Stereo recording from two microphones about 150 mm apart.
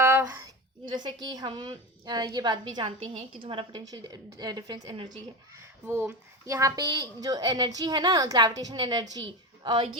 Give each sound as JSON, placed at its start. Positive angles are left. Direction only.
{"t": 0.0, "sound": "a sound", "side_deg": -20}
{"t": 0.9, "sound": "a woman's voice", "side_deg": -30}
{"t": 2.8, "sound": "a woman's voice", "side_deg": -40}
{"t": 5.8, "sound": "a woman's voice", "side_deg": -15}